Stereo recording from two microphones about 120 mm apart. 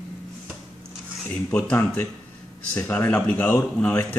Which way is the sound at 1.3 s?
10° left (ahead or behind).